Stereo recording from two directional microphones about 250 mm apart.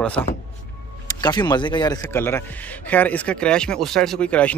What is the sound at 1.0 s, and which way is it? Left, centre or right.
A man's voice, centre.